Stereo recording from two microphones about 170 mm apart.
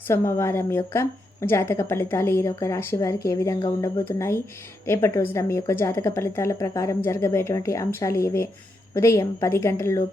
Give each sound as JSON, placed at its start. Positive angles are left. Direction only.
{"t": 0.1, "sound": "a woman's voice", "side_deg": 15}